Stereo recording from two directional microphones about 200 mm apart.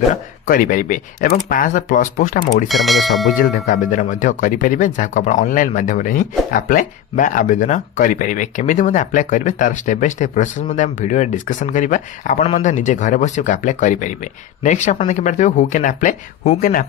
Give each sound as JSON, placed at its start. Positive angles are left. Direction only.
{"t": 0.1, "sound": "speech", "side_deg": 40}
{"t": 2.7, "sound": "speech", "side_deg": 0}
{"t": 3.3, "sound": "speech", "side_deg": 40}